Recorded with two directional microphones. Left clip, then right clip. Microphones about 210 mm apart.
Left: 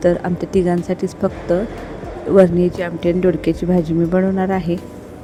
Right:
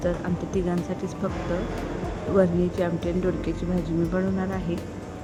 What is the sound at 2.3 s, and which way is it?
Speech, 25° left (ahead or behind).